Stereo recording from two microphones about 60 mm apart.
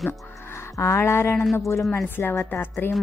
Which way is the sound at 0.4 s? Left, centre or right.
Left.